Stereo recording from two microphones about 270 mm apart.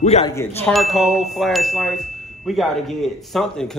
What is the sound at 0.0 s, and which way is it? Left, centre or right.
Speech, left.